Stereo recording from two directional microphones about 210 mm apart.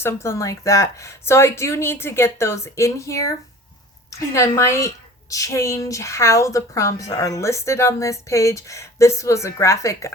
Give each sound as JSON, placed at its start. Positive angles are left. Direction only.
{"t": 0.0, "sound": "speech", "side_deg": 10}
{"t": 4.4, "sound": "speech", "side_deg": 15}